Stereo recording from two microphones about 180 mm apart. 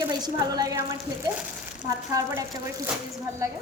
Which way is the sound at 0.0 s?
20° right (ahead or behind).